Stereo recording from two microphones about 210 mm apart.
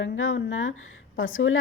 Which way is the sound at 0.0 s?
65° left (ahead or behind).